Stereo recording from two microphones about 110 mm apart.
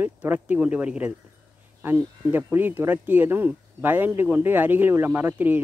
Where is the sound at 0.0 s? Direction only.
15° right (ahead or behind).